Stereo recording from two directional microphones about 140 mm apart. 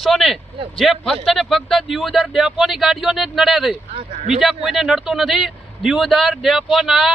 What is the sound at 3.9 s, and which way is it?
Speech, 55° right (ahead or behind).